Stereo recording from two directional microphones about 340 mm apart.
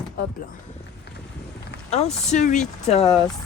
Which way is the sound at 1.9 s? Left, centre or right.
Centre.